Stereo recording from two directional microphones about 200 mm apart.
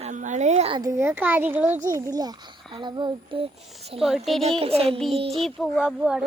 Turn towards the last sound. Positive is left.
turn(degrees=-5)  # may be behind; listen again after turning